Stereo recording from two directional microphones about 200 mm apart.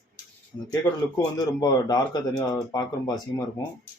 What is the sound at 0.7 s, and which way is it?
Speech, 15° left (ahead or behind).